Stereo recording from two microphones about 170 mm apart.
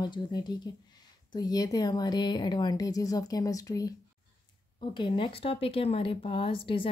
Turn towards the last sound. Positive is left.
turn(degrees=30)  # may be behind; listen again after turning